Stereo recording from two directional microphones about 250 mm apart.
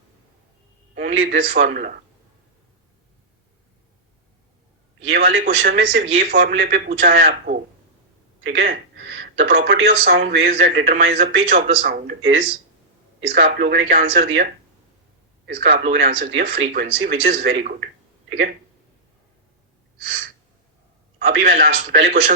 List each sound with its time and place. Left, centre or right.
0.9 s speech: right
5.1 s speech: right
13.1 s speech: right
15.8 s speech: right
16.3 s speech: right
21.2 s speech: right